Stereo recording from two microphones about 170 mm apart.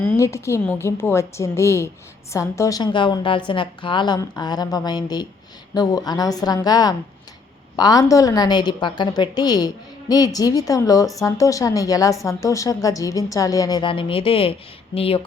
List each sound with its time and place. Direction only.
0.2 s a woman's voice: 15° left (ahead or behind); by 15.2 s 35° left (ahead or behind)